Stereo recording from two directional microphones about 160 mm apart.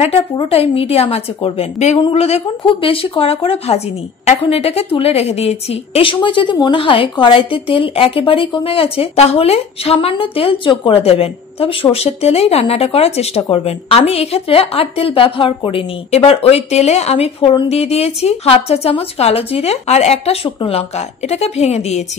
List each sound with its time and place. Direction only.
0.0 s a woman's voice: 40° left (ahead or behind)